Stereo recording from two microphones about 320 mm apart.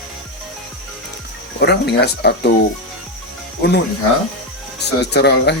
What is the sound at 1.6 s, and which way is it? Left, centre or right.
Speech, left.